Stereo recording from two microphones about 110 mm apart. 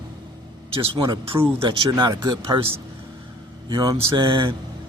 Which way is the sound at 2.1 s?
35° right (ahead or behind).